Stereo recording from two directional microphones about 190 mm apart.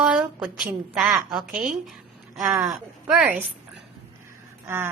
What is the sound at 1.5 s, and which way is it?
Speech, 45° right (ahead or behind).